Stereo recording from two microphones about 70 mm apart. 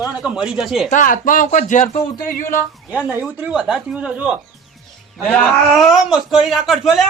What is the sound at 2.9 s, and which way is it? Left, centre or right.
Speech, right.